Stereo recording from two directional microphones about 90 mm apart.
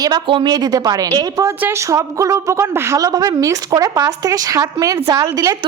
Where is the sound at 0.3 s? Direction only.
55° right (ahead or behind); by 5.5 s 40° right (ahead or behind).